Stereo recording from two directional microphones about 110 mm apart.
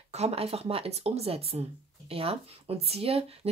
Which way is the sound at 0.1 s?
70° right (ahead or behind).